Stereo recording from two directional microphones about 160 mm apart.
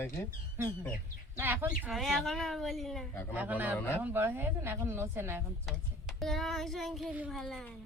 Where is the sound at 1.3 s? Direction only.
10° right (ahead or behind).